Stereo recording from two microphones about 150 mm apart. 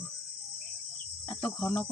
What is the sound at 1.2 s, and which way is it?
Speech, 10° left (ahead or behind).